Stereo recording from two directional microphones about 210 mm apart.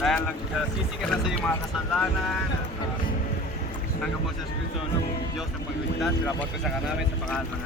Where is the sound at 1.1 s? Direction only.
5° left (ahead or behind).